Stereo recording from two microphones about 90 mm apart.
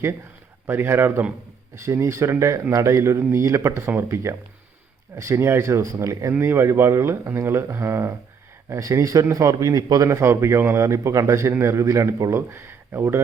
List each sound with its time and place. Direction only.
0.7 s speech: 25° right (ahead or behind)
6.4 s speech: 30° right (ahead or behind)